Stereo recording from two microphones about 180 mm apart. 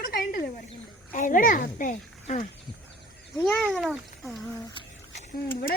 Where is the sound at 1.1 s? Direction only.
45° left (ahead or behind).